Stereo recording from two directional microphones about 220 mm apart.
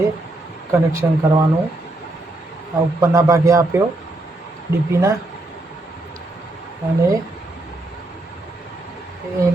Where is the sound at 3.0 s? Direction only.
15° right (ahead or behind).